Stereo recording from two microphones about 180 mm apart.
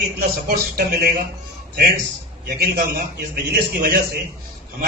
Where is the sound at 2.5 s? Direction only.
60° right (ahead or behind).